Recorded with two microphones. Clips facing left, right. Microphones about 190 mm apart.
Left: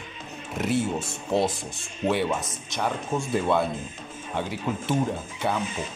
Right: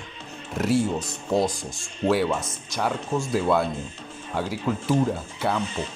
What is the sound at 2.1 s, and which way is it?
Speech, centre (ahead or behind).